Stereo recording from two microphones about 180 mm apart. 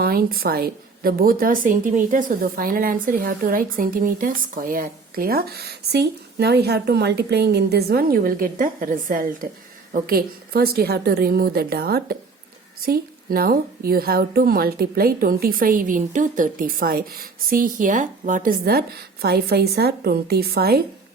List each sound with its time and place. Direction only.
0.0 s a woman's voice: 55° right (ahead or behind)